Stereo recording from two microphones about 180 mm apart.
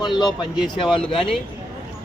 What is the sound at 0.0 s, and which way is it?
Speech, 25° left (ahead or behind).